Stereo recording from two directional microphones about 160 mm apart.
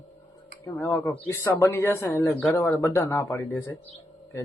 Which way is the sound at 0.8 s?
10° left (ahead or behind).